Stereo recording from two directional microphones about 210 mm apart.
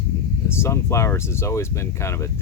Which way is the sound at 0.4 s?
10° left (ahead or behind).